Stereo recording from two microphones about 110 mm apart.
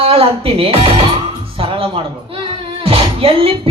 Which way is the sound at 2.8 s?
60° right (ahead or behind).